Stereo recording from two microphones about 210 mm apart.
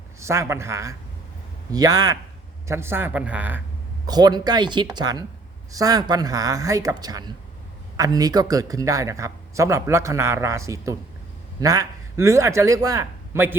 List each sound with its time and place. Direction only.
0.2 s a man's voice: 15° right (ahead or behind)
4.0 s a man's voice: 20° right (ahead or behind)